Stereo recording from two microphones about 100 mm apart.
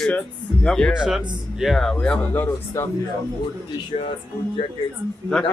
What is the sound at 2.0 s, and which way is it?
Speech, 15° left (ahead or behind).